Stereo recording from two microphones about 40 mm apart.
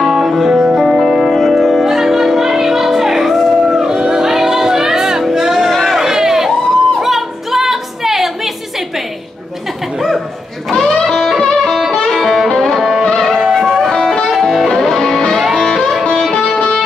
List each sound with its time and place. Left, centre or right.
0.0 s music: centre
5.3 s a sound: centre
5.7 s a sound: centre
7.0 s music: centre
10.7 s music: centre
11.1 s music: centre
13.3 s music: centre
13.8 s music: centre
16.3 s music: left